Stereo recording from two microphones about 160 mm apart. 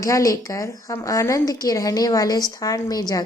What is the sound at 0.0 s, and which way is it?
A woman's voice, 20° left (ahead or behind).